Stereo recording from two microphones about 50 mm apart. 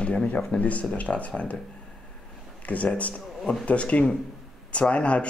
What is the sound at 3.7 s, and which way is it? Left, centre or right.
Speech, left.